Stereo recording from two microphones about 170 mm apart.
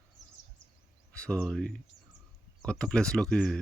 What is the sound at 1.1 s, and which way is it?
Speech, 5° left (ahead or behind).